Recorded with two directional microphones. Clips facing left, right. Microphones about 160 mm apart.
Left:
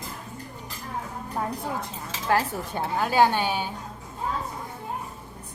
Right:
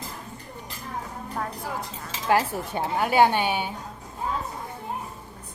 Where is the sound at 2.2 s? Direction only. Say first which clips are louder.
Right 2 dB; 20° right (ahead or behind).